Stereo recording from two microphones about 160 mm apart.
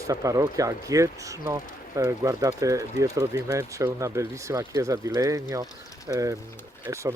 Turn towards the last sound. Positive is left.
turn(degrees=-15)  # may be behind; listen again after turning